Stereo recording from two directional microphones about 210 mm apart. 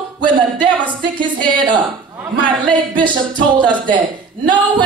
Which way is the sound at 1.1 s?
20° right (ahead or behind).